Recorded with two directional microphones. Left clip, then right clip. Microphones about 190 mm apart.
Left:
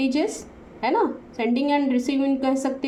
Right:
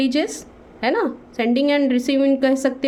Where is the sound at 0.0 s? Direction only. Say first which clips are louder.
Right 3 dB; 45° right (ahead or behind).